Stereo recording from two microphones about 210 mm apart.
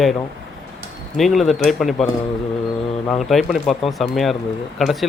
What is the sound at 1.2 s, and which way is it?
Speech, centre (ahead or behind).